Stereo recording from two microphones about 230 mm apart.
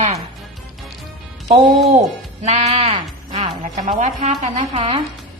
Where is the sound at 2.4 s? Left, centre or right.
Right.